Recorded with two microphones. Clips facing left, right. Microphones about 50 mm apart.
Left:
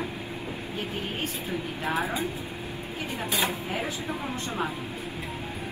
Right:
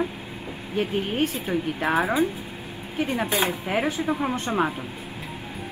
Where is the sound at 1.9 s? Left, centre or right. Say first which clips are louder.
Right 6 dB; right.